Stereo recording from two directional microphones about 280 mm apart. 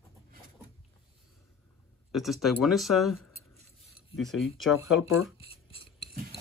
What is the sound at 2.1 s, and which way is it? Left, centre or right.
Speech, centre.